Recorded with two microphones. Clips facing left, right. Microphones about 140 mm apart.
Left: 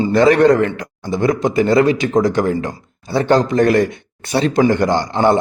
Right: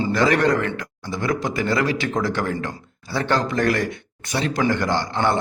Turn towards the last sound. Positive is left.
turn(degrees=20)  # may be behind; listen again after turning